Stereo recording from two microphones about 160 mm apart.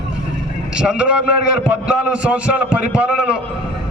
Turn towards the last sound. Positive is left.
turn(degrees=-5)  # may be behind; listen again after turning